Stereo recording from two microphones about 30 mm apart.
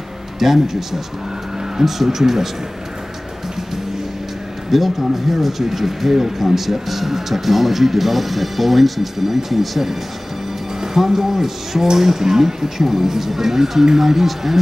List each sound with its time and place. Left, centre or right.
0.4 s speech: centre
4.6 s speech: centre